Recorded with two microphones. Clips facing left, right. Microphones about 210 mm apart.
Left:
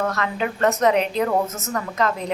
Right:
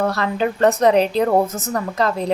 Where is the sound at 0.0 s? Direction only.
35° right (ahead or behind).